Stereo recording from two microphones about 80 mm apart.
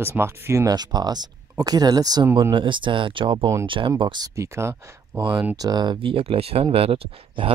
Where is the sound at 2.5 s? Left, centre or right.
Right.